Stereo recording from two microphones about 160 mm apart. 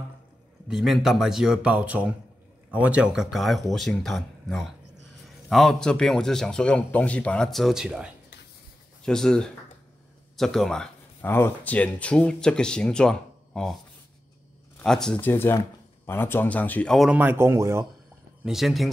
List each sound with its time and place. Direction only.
0.7 s a man's voice: centre (ahead or behind)
10.3 s a sound: centre (ahead or behind)
11.2 s a man's voice: 15° left (ahead or behind)
14.8 s a man's voice: 5° left (ahead or behind)
17.2 s speech: 15° right (ahead or behind)
18.4 s a man's voice: centre (ahead or behind)